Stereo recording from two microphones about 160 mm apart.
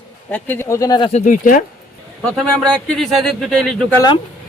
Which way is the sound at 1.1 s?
55° left (ahead or behind).